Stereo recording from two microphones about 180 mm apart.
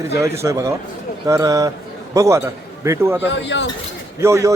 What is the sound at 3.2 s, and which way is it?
Speech, 90° left.